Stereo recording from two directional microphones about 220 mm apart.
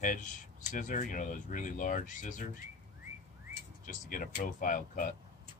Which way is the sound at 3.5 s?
35° left (ahead or behind).